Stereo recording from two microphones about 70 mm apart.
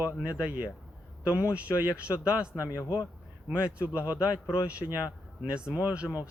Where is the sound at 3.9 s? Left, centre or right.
Right.